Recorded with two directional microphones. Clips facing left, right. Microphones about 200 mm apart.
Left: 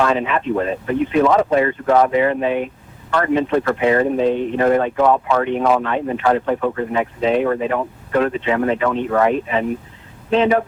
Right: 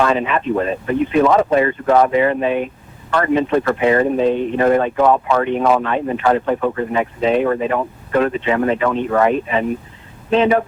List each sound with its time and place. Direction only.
0.0 s speech: 15° right (ahead or behind)